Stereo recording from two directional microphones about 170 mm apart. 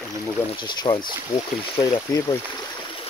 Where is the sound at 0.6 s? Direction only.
25° left (ahead or behind).